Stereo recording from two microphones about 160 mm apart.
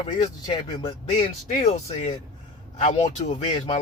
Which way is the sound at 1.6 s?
45° left (ahead or behind).